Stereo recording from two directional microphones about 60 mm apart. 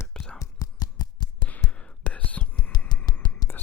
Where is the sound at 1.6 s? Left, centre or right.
Centre.